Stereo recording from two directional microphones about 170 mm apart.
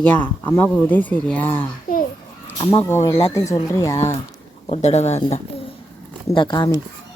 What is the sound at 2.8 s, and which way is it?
Speech, 15° left (ahead or behind).